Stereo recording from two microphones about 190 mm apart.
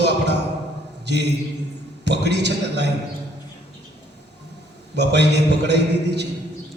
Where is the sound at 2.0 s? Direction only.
60° right (ahead or behind).